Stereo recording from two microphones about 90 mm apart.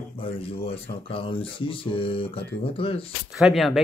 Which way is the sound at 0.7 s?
90° left.